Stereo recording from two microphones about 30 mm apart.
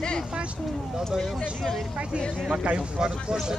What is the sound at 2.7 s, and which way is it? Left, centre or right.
Speech, right.